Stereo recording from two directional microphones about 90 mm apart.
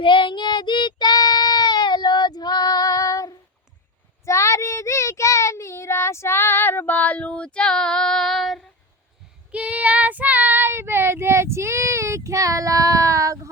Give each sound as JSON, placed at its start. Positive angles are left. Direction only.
{"t": 0.0, "sound": "child singing", "side_deg": 65}
{"t": 9.5, "sound": "child singing", "side_deg": -15}